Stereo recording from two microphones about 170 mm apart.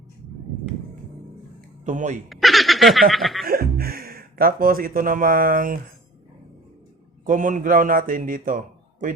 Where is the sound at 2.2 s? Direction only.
Centre (ahead or behind).